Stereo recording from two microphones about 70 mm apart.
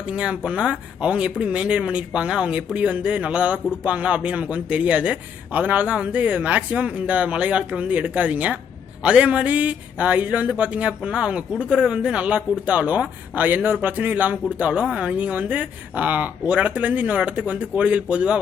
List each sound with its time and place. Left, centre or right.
0.0 s speech: centre
14.6 s speech: centre